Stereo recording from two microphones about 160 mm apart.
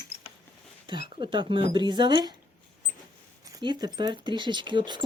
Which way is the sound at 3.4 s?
25° right (ahead or behind).